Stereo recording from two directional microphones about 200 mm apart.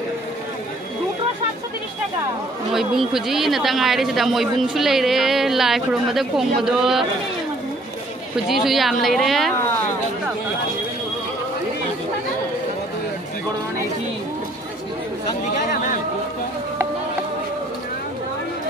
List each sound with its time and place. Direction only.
2.7 s a man's voice: centre (ahead or behind)
8.5 s a man's voice: centre (ahead or behind)
15.7 s a sound: 40° left (ahead or behind)